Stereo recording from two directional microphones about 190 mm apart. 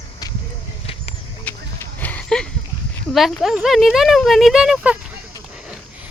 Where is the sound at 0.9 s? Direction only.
30° left (ahead or behind).